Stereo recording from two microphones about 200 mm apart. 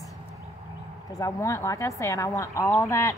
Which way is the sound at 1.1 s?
15° left (ahead or behind).